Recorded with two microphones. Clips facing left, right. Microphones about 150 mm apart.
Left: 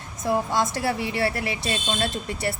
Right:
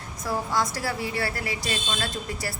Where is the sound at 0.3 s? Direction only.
25° left (ahead or behind).